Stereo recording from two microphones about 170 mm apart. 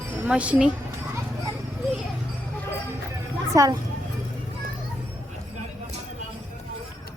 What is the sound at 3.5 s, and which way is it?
Speech, 20° right (ahead or behind).